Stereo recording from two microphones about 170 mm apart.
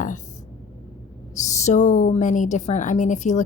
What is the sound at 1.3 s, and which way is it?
A woman's voice, 45° left (ahead or behind).